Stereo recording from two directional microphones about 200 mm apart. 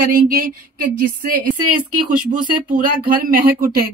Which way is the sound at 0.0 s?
45° right (ahead or behind).